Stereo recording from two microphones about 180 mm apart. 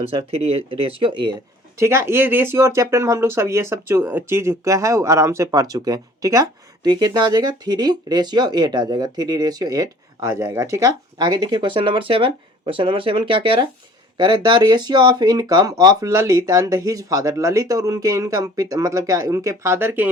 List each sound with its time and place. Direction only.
0.0 s speech: 30° right (ahead or behind)
1.8 s speech: 15° right (ahead or behind)